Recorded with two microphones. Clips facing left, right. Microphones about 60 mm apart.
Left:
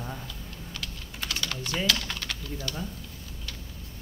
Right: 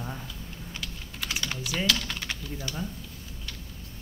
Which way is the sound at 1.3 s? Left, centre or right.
Centre.